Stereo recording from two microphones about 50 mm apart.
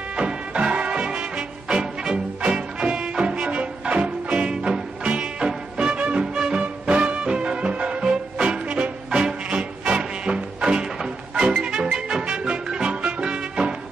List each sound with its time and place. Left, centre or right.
0.1 s music: right
6.3 s music: centre